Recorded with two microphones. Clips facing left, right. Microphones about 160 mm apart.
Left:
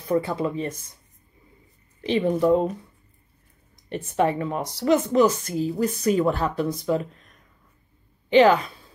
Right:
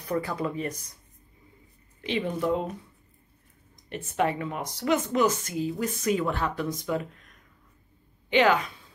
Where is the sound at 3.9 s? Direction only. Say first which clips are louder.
Left 4 dB; 35° left (ahead or behind).